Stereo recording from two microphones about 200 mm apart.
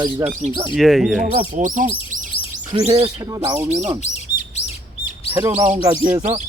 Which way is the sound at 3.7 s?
35° right (ahead or behind).